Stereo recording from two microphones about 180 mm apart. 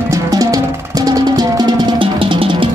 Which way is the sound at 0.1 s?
20° right (ahead or behind).